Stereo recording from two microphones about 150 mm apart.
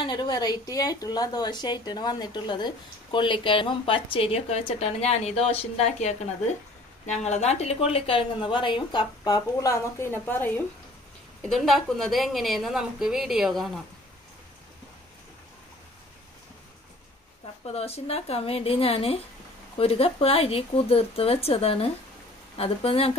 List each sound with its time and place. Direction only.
0.0 s a woman's voice: 30° left (ahead or behind); by 10.6 s 15° left (ahead or behind)
11.4 s a woman's voice: centre (ahead or behind)
17.7 s a woman's voice: 45° left (ahead or behind)